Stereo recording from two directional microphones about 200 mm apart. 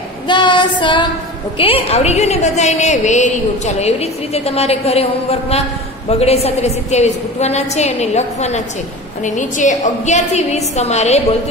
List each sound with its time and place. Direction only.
0.3 s child singing: 25° left (ahead or behind)
1.6 s a woman's voice: 30° left (ahead or behind)